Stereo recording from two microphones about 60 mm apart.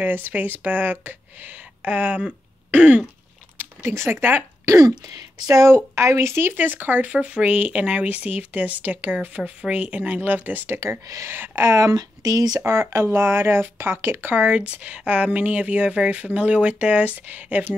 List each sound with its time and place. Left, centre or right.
0.0 s speech: right
3.8 s speech: right
4.7 s speech: right
5.9 s speech: right
6.5 s speech: right
7.1 s speech: right
10.8 s speech: right
11.2 s speech: right
11.7 s speech: right
12.6 s speech: right
13.0 s speech: right
14.2 s speech: right